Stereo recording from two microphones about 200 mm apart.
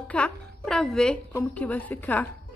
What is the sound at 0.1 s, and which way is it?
Speech, 5° left (ahead or behind).